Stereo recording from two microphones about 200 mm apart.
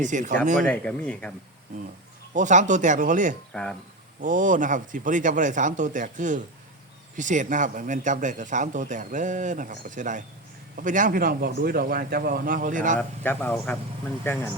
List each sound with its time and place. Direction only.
0.0 s speech: 40° right (ahead or behind)
0.6 s speech: 5° left (ahead or behind)
2.3 s speech: 40° right (ahead or behind)
3.5 s speech: 5° left (ahead or behind)
4.2 s a man's voice: 40° right (ahead or behind)
13.0 s a man's voice: 5° left (ahead or behind)